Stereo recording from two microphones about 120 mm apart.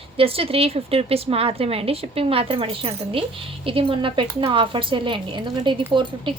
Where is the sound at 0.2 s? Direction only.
50° right (ahead or behind).